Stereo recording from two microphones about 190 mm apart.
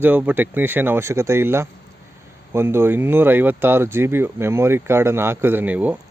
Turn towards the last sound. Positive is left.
turn(degrees=-10)  # may be behind; listen again after turning